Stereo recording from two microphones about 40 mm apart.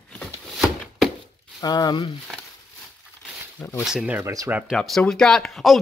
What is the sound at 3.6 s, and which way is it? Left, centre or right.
Speech, centre.